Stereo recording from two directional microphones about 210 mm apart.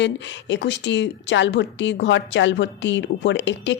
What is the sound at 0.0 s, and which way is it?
A woman's voice, 60° left (ahead or behind).